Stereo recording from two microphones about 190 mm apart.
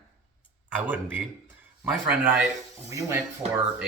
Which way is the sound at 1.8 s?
5° right (ahead or behind).